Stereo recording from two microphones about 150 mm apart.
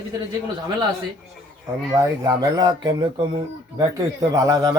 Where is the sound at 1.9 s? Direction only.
25° right (ahead or behind).